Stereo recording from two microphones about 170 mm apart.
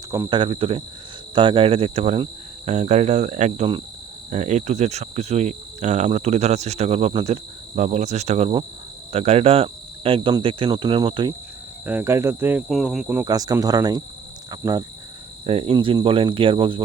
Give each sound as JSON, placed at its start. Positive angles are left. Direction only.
{"t": 0.1, "sound": "speech", "side_deg": -25}
{"t": 1.4, "sound": "cricket", "side_deg": -30}
{"t": 11.9, "sound": "speech", "side_deg": -10}
{"t": 12.6, "sound": "speech", "side_deg": 0}
{"t": 13.2, "sound": "speech", "side_deg": -20}
{"t": 15.4, "sound": "cricket", "side_deg": -35}